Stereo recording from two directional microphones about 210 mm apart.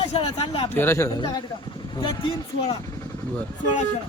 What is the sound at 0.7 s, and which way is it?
A man's voice, 10° left (ahead or behind).